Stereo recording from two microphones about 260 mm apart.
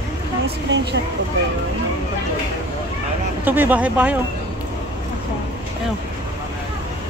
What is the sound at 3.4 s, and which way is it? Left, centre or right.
Speech, centre.